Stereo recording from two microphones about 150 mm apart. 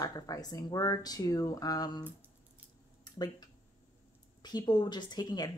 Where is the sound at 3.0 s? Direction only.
25° left (ahead or behind).